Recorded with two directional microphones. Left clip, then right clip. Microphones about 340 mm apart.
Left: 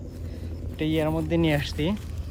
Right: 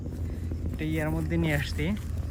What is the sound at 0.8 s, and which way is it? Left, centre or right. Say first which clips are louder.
Speech: left 6 dB; centre.